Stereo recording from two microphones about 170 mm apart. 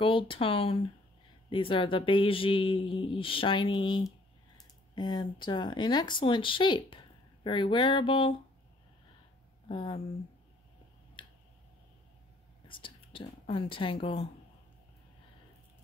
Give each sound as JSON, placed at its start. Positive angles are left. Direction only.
{"t": 0.0, "sound": "speech", "side_deg": 30}
{"t": 9.7, "sound": "speech", "side_deg": 30}
{"t": 11.2, "sound": "a sound", "side_deg": 30}
{"t": 12.6, "sound": "whispering", "side_deg": 30}
{"t": 14.0, "sound": "speech", "side_deg": 35}